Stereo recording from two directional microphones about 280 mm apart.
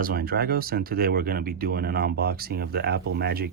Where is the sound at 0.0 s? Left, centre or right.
Right.